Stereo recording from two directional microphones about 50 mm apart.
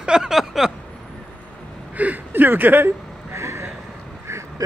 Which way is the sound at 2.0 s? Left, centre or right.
Right.